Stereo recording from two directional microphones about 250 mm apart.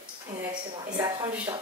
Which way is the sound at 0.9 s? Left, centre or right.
Centre.